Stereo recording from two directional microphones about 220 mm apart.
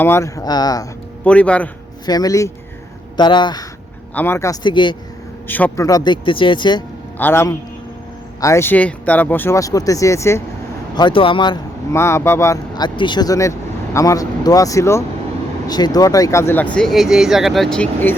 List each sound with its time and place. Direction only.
0.0 s speech: 10° left (ahead or behind)
1.2 s speech: 5° left (ahead or behind)
2.0 s speech: 15° left (ahead or behind)
4.1 s speech: 10° left (ahead or behind)
5.5 s speech: 10° left (ahead or behind)
7.2 s speech: 10° left (ahead or behind)
16.7 s speech: centre (ahead or behind)